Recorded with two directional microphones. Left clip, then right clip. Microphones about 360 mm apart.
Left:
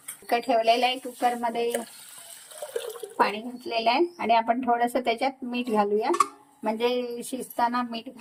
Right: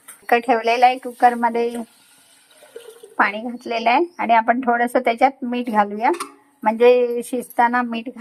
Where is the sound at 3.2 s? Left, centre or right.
Right.